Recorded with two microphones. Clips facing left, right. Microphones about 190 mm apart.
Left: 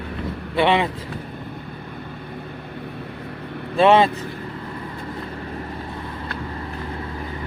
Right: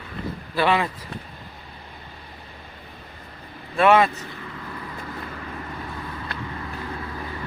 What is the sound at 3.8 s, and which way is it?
Speech, 25° left (ahead or behind).